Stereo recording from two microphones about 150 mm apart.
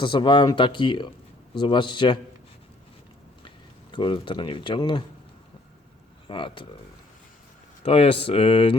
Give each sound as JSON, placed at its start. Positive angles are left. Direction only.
{"t": 0.0, "sound": "speech", "side_deg": 35}
{"t": 3.9, "sound": "speech", "side_deg": 35}
{"t": 6.2, "sound": "speech", "side_deg": 35}
{"t": 7.9, "sound": "speech", "side_deg": 40}